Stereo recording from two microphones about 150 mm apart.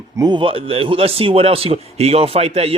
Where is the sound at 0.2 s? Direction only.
30° right (ahead or behind).